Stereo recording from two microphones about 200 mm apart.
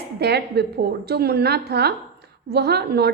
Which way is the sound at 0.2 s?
55° right (ahead or behind).